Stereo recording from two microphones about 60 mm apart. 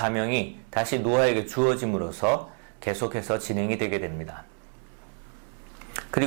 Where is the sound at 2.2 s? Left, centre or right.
Centre.